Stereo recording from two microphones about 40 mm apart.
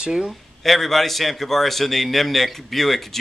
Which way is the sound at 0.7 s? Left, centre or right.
Centre.